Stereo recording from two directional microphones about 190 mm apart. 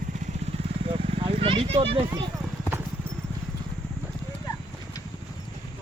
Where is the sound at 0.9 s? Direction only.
30° right (ahead or behind).